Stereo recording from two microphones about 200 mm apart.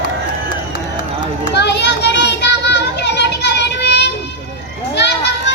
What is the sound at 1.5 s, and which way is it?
Children playing, 60° left (ahead or behind).